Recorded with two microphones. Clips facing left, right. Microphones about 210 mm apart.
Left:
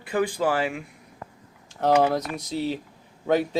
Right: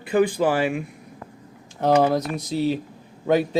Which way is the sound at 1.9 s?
10° left (ahead or behind).